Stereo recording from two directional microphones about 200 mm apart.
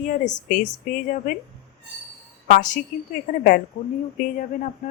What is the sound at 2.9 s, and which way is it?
A woman's voice, 40° left (ahead or behind).